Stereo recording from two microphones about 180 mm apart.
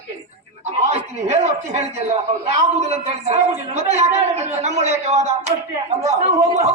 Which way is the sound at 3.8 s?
40° right (ahead or behind).